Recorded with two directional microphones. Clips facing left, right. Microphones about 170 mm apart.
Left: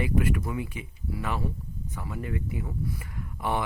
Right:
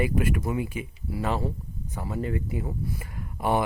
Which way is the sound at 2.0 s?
35° right (ahead or behind).